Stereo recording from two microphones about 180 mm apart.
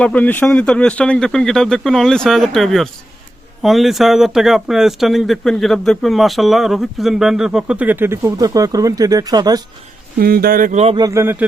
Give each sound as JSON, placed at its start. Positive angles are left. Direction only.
{"t": 0.0, "sound": "speech", "side_deg": 10}
{"t": 10.2, "sound": "speech", "side_deg": -60}
{"t": 10.9, "sound": "speech", "side_deg": -20}